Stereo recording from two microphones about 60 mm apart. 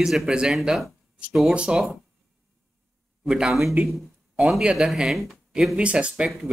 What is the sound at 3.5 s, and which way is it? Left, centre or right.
Speech, centre.